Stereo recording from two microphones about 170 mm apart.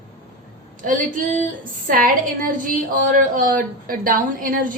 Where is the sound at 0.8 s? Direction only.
50° right (ahead or behind).